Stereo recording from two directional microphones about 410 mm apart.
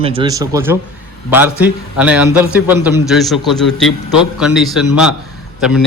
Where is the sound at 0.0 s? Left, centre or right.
Centre.